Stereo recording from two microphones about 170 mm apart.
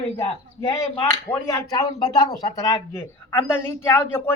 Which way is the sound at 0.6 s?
15° left (ahead or behind).